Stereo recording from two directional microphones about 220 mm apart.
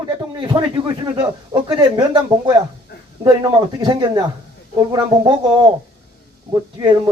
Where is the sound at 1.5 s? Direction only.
20° right (ahead or behind).